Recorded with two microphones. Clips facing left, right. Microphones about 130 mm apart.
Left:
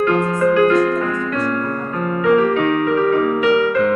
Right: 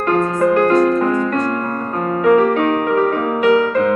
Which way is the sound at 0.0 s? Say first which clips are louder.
Even; 45° right (ahead or behind).